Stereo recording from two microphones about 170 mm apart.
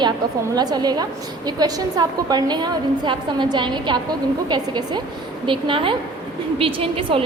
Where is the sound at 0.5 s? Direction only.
25° right (ahead or behind).